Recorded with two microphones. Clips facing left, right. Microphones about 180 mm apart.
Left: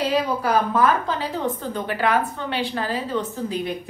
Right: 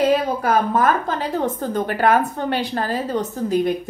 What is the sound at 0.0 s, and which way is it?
A woman's voice, 50° right (ahead or behind).